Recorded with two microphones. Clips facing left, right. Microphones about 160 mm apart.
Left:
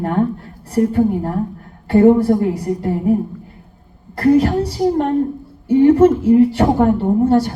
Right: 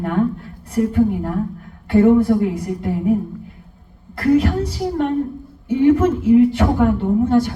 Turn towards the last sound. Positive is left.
turn(degrees=40)  # may be behind; listen again after turning